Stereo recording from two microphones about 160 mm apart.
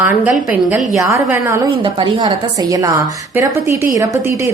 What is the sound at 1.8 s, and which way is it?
A woman's voice, 30° right (ahead or behind).